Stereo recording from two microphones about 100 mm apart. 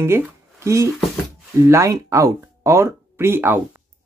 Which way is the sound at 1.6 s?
30° right (ahead or behind).